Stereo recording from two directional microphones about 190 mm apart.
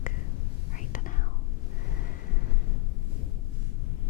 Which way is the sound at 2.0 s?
45° left (ahead or behind).